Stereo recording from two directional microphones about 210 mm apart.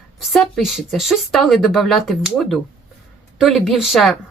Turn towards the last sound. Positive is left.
turn(degrees=0)  # may be behind; listen again after turning